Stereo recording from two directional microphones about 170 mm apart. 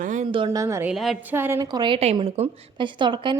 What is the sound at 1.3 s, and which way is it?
A woman's voice, 15° right (ahead or behind).